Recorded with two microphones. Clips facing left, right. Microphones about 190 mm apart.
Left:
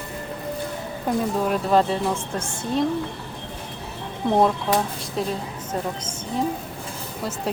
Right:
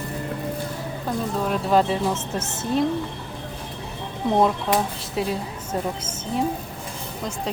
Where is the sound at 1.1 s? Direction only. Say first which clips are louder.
Left 4 dB; 15° left (ahead or behind).